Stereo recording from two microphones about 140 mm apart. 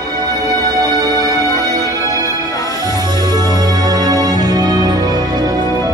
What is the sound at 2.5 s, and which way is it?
Music, 25° left (ahead or behind).